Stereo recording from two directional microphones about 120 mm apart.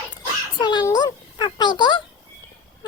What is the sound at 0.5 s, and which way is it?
A child's voice, 35° left (ahead or behind).